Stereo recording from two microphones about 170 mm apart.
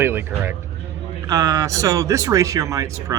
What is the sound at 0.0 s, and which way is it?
Speech, 15° right (ahead or behind).